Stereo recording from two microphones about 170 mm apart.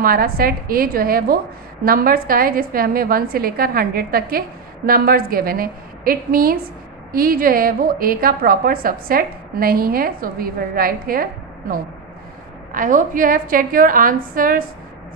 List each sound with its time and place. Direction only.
0.0 s a woman's voice: 60° right (ahead or behind)
12.7 s a woman's voice: 50° right (ahead or behind)